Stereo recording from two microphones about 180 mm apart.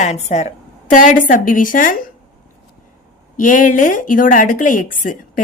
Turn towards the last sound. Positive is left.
turn(degrees=45)  # may be behind; listen again after turning